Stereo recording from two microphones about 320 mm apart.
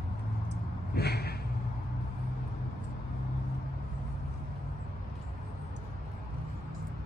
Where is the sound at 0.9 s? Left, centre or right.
Left.